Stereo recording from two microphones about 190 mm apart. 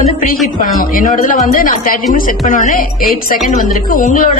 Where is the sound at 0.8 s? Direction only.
45° left (ahead or behind).